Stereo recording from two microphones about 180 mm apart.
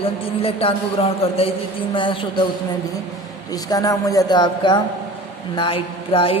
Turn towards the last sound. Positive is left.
turn(degrees=30)  # may be behind; listen again after turning